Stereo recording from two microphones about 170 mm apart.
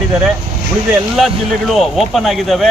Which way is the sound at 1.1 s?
Centre (ahead or behind).